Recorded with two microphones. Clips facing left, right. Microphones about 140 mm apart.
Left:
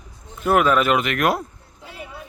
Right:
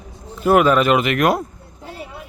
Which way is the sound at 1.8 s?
40° right (ahead or behind).